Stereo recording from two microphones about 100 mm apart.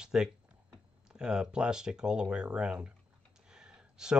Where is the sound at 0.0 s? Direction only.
5° right (ahead or behind).